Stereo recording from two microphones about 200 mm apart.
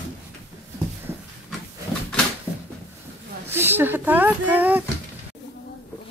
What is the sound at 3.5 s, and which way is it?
Speech, 10° right (ahead or behind).